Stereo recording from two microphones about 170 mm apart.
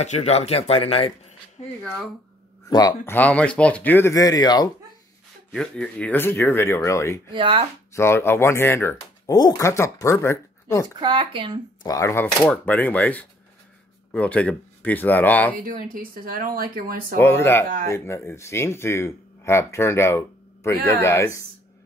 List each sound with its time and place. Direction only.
0.0 s speech: 40° left (ahead or behind)
1.8 s speech: centre (ahead or behind)
2.7 s speech: 20° left (ahead or behind)
3.2 s speech: 5° left (ahead or behind); by 4.6 s 25° left (ahead or behind)
5.5 s speech: 5° left (ahead or behind)
7.3 s speech: 30° right (ahead or behind)
7.9 s speech: 15° left (ahead or behind)
11.0 s speech: 30° right (ahead or behind)
11.8 s speech: 20° left (ahead or behind)
15.5 s speech: 55° right (ahead or behind)
17.2 s speech: 15° left (ahead or behind)